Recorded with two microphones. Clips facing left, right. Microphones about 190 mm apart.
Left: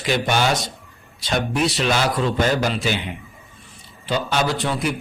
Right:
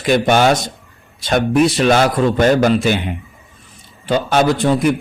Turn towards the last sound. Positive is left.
turn(degrees=-45)  # may be behind; listen again after turning